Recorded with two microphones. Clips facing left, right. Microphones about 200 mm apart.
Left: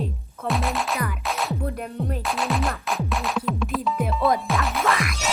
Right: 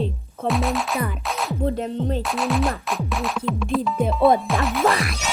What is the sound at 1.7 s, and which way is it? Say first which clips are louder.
Music: right 5 dB; 25° right (ahead or behind).